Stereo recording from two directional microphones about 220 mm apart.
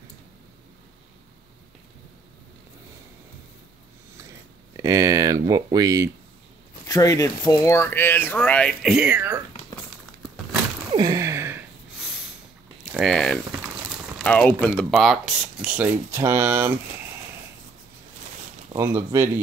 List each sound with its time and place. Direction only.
4.7 s speech: 15° right (ahead or behind)
6.9 s speech: 15° left (ahead or behind); by 9.4 s 10° right (ahead or behind)
10.9 s a sound: 20° right (ahead or behind)
12.9 s speech: centre (ahead or behind)
18.8 s speech: 10° right (ahead or behind)